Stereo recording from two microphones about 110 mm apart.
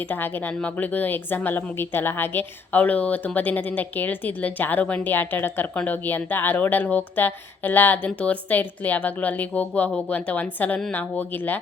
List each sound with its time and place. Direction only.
0.1 s speech: 20° left (ahead or behind)